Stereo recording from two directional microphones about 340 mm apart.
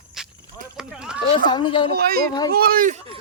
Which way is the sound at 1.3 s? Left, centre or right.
Centre.